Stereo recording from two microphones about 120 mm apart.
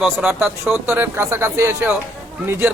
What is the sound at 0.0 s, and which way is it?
Speech, 5° right (ahead or behind).